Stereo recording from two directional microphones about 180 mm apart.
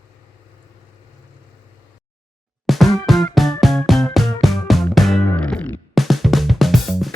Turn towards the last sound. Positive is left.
turn(degrees=0)  # may be behind; listen again after turning